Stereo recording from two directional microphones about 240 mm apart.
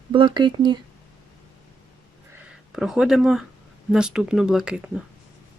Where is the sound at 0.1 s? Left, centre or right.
Centre.